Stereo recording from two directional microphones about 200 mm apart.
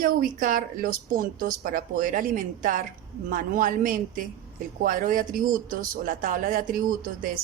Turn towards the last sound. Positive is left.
turn(degrees=-45)  # may be behind; listen again after turning